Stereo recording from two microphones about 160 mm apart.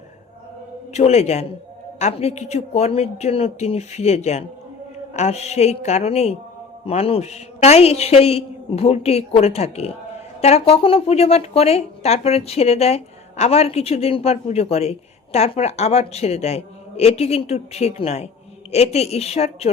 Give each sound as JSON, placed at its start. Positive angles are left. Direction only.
{"t": 0.9, "sound": "speech", "side_deg": 45}